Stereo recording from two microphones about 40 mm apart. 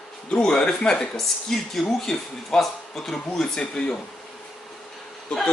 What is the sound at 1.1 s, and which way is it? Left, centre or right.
Speech, centre.